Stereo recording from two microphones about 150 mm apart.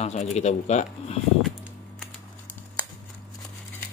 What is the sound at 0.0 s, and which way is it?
Speech, 45° left (ahead or behind).